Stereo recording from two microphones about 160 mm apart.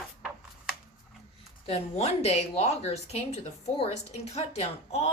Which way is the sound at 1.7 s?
40° left (ahead or behind).